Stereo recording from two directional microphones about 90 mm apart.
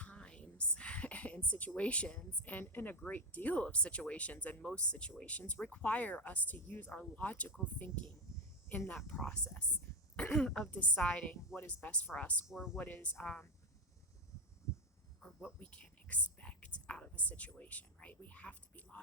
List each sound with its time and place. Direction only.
0.0 s a sound: 15° left (ahead or behind)
3.0 s speech: 20° left (ahead or behind)
9.2 s speech: 10° left (ahead or behind)
12.5 s speech: 5° right (ahead or behind)
12.7 s speech: 20° left (ahead or behind)
15.6 s speech: 15° left (ahead or behind)